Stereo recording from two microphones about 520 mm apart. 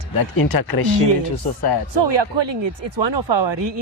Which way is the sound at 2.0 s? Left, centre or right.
Right.